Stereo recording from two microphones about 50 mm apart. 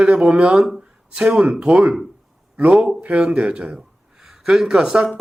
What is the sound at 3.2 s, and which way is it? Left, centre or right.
A man's voice, centre.